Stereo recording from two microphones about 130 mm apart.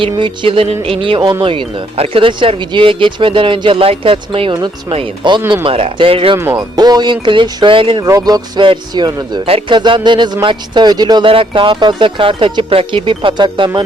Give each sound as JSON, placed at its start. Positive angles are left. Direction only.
{"t": 0.2, "sound": "music", "side_deg": -45}
{"t": 1.4, "sound": "speech", "side_deg": -45}
{"t": 5.6, "sound": "music", "side_deg": -45}
{"t": 6.3, "sound": "speech", "side_deg": -25}
{"t": 8.0, "sound": "speech", "side_deg": -30}
{"t": 9.5, "sound": "speech", "side_deg": -45}